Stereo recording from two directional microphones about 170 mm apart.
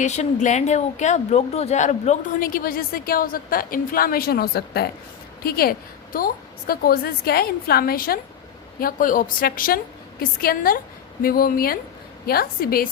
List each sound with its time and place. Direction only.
0.0 s speech: 45° left (ahead or behind); by 12.9 s 60° left (ahead or behind)